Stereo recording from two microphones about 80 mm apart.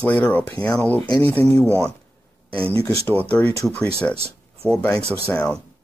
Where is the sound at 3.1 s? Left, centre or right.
Left.